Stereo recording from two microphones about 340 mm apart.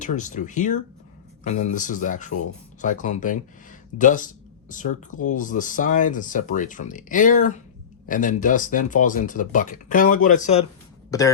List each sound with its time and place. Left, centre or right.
0.0 s speech: left
11.1 s speech: centre